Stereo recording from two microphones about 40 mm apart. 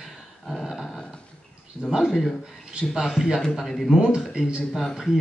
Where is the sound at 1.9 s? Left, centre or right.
Centre.